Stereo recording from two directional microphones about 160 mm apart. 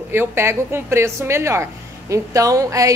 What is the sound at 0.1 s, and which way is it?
A woman's voice, 15° right (ahead or behind).